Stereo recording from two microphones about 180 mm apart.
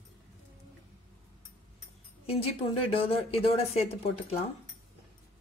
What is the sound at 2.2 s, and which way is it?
Speech, 30° left (ahead or behind).